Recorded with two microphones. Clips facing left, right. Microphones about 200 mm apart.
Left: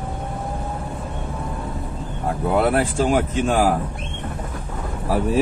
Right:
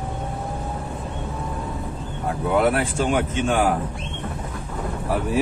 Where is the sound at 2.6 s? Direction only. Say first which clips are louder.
Left 3 dB; 35° left (ahead or behind).